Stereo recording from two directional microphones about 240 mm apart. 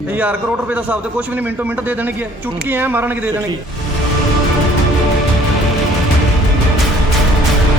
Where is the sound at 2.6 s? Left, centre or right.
Centre.